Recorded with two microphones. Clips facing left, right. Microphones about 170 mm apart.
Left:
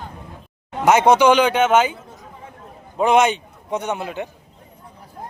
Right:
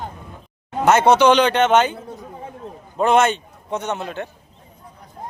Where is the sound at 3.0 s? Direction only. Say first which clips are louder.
Even; 15° left (ahead or behind).